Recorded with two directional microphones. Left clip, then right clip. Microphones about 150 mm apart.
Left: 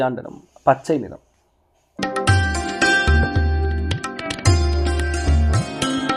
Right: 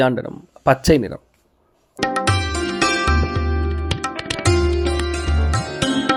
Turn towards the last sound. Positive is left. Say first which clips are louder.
# right 2 dB
turn(degrees=0)  # may be behind; listen again after turning